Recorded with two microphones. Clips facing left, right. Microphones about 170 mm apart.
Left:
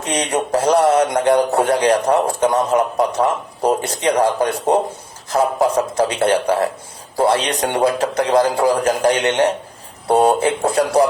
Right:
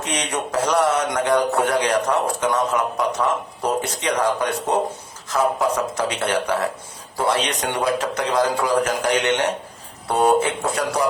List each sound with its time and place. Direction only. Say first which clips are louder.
0.0 s a man's voice: left 5 dB; 30° left (ahead or behind)